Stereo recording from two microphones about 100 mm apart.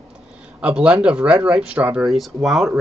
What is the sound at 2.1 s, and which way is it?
Speech, centre (ahead or behind).